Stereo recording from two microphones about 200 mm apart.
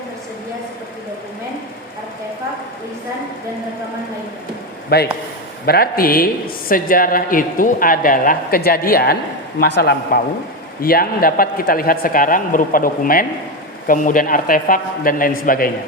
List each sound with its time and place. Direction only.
4.9 s a man's voice: 50° left (ahead or behind)